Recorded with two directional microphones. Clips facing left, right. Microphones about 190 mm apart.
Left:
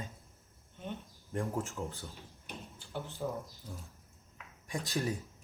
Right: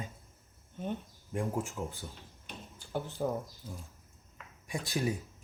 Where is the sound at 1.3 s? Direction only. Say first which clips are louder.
Right 1 dB; 15° right (ahead or behind).